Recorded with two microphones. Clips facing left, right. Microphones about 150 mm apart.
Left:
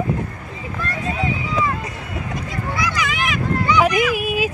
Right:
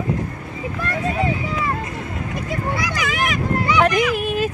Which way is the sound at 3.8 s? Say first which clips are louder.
Right 1 dB; 5° left (ahead or behind).